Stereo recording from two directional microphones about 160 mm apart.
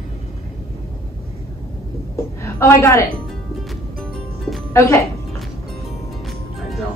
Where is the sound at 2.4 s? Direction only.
15° left (ahead or behind).